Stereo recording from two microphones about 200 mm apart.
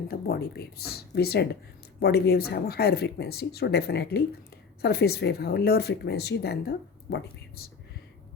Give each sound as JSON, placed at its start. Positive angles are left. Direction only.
{"t": 0.1, "sound": "speech", "side_deg": 50}